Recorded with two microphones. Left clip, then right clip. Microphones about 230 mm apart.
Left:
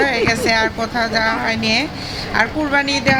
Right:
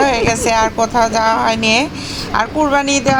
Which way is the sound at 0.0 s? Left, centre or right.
Centre.